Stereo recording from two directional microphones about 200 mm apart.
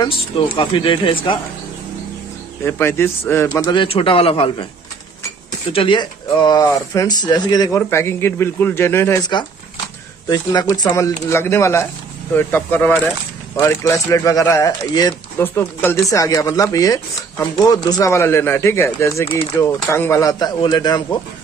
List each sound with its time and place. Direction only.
0.6 s a man's voice: 25° left (ahead or behind)
2.6 s a man's voice: 10° left (ahead or behind); by 4.6 s 25° left (ahead or behind)
5.7 s speech: 25° left (ahead or behind)
10.3 s speech: 20° left (ahead or behind)